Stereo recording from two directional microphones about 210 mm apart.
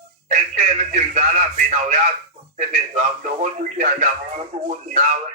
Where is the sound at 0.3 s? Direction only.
35° right (ahead or behind).